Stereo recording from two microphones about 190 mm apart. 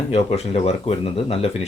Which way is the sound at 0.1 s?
30° left (ahead or behind).